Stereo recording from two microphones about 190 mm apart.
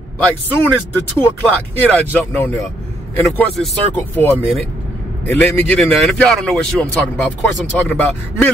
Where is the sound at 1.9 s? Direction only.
10° left (ahead or behind).